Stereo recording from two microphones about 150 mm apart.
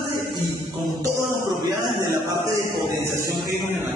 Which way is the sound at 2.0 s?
25° right (ahead or behind).